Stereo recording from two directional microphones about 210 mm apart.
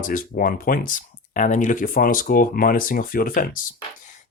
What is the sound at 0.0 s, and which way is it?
Speech, 40° left (ahead or behind).